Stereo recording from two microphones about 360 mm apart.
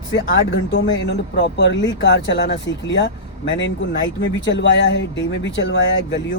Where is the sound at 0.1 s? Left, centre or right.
Left.